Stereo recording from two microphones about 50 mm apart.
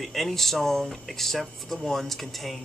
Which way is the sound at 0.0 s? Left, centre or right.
Centre.